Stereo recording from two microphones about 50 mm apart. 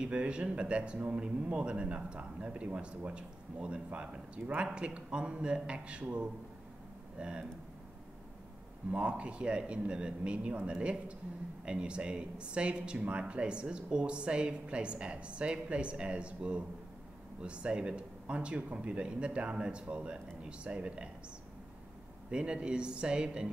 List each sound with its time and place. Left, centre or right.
0.0 s speech: right
7.2 s speech: centre
8.9 s speech: right
22.3 s speech: centre